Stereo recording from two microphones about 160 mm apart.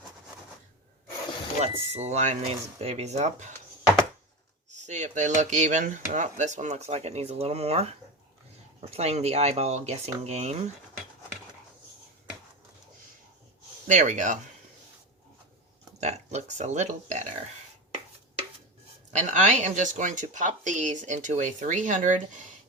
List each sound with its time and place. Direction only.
1.6 s speech: 45° right (ahead or behind)
4.8 s speech: 45° right (ahead or behind)
13.8 s speech: 50° right (ahead or behind)
16.0 s speech: 45° right (ahead or behind)
19.1 s speech: 50° right (ahead or behind)